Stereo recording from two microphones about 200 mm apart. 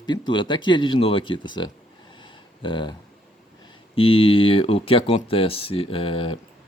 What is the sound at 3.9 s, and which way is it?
Speech, 25° left (ahead or behind).